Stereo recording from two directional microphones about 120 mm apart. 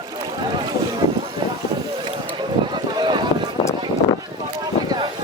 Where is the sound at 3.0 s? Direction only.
40° right (ahead or behind).